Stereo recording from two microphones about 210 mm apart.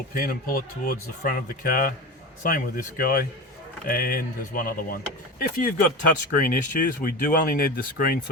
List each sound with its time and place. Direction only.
0.1 s speech: 40° left (ahead or behind)